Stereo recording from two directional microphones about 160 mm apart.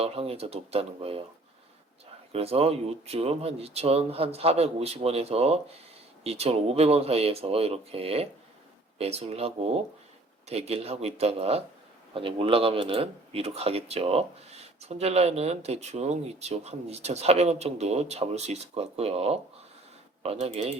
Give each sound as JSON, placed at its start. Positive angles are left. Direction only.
{"t": 0.0, "sound": "speech", "side_deg": -40}
{"t": 2.3, "sound": "speech", "side_deg": -40}